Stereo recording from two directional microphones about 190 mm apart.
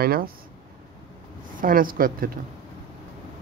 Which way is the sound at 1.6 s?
50° right (ahead or behind).